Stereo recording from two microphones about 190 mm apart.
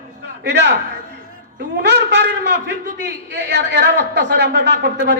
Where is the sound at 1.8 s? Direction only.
65° right (ahead or behind).